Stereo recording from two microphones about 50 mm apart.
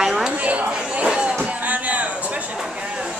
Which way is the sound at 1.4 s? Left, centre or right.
Right.